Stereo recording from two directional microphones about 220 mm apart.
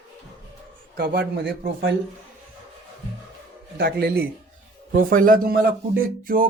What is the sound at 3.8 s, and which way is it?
Speech, 45° right (ahead or behind).